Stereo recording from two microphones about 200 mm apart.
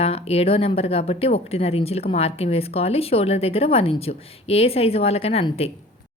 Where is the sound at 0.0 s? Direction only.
30° left (ahead or behind).